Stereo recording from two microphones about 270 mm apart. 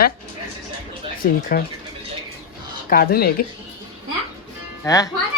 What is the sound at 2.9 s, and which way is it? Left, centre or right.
Speech, left.